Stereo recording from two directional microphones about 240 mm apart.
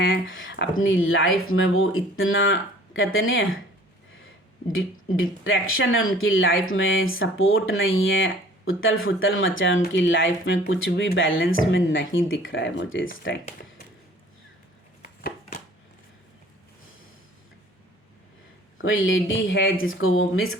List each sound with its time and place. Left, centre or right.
0.0 s speech: left
4.7 s speech: left
15.0 s a sound: left
18.8 s speech: left